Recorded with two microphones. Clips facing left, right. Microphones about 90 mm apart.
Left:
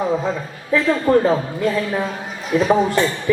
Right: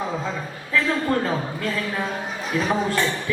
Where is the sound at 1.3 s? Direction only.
20° left (ahead or behind).